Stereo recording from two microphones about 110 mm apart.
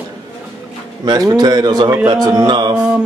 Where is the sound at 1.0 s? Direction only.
40° right (ahead or behind).